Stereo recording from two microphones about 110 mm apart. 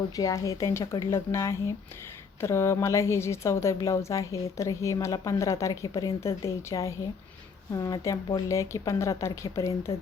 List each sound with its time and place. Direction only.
0.2 s a woman's voice: 30° left (ahead or behind)